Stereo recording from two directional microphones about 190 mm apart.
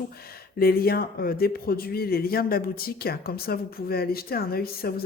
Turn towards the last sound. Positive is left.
turn(degrees=55)  # may be behind; listen again after turning